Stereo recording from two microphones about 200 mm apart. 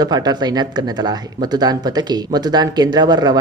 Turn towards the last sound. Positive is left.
turn(degrees=-20)  # may be behind; listen again after turning